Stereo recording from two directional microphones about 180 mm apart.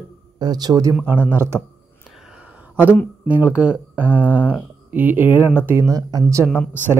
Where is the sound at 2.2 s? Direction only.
5° right (ahead or behind).